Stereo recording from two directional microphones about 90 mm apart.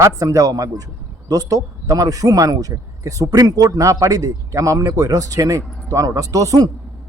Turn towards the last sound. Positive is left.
turn(degrees=-40)  # may be behind; listen again after turning